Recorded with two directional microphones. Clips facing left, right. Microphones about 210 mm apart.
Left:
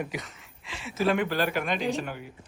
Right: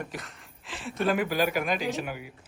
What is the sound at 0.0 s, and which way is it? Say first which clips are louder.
Speech: left 4 dB; centre (ahead or behind).